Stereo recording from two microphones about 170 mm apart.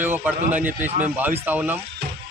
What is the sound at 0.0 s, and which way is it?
Speech, 10° right (ahead or behind).